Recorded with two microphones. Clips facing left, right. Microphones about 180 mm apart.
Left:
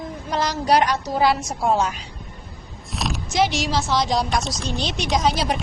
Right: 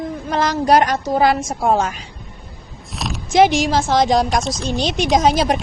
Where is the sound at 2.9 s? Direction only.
Centre (ahead or behind).